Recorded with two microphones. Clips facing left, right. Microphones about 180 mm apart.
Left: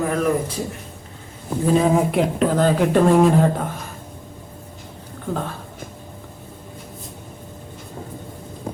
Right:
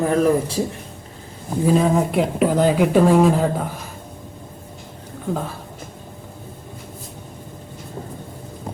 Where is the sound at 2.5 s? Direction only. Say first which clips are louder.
Right 1 dB; 10° right (ahead or behind).